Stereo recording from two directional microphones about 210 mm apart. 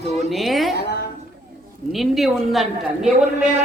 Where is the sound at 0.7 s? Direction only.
50° left (ahead or behind).